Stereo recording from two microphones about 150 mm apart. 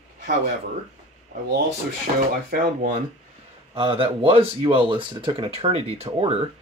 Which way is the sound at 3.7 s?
35° right (ahead or behind).